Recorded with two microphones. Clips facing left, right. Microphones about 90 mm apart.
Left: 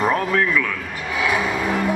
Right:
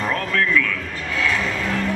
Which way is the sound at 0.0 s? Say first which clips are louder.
Left 3 dB; 15° left (ahead or behind).